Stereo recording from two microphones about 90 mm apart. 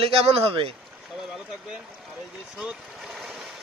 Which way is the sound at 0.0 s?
90° right.